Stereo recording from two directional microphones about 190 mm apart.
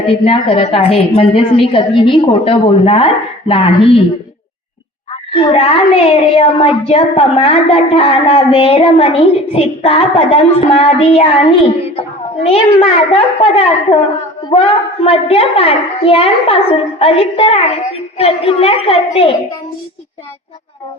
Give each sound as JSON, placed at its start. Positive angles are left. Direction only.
{"t": 0.1, "sound": "a woman's voice", "side_deg": 30}
{"t": 5.3, "sound": "a woman's voice", "side_deg": 30}